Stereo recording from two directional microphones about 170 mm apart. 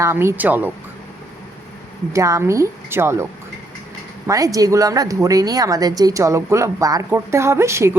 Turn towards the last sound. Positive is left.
turn(degrees=-15)  # may be behind; listen again after turning